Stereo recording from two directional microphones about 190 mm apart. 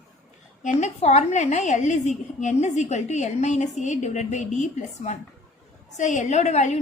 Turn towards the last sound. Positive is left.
turn(degrees=35)  # may be behind; listen again after turning